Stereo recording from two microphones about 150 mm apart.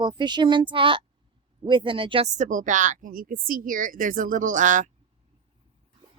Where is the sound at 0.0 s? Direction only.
30° right (ahead or behind).